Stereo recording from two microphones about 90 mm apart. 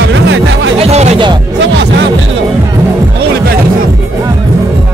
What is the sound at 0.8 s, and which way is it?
Music, 70° right (ahead or behind).